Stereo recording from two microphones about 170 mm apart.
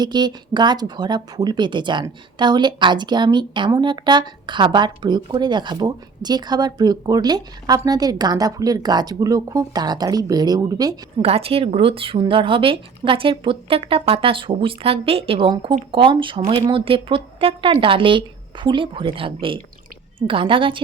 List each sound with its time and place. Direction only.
0.0 s speech: 25° right (ahead or behind)
11.2 s speech: 35° right (ahead or behind)